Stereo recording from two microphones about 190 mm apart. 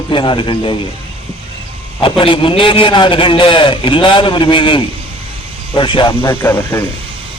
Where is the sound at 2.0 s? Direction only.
25° left (ahead or behind).